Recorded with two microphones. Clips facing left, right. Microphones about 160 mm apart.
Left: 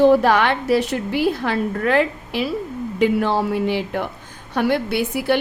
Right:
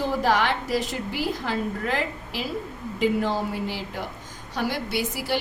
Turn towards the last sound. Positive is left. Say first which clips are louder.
# left 8 dB
turn(degrees=60)  # may be behind; listen again after turning